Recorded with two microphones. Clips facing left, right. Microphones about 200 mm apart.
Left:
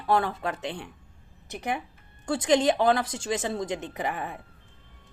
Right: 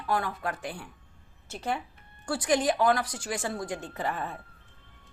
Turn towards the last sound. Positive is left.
turn(degrees=15)  # may be behind; listen again after turning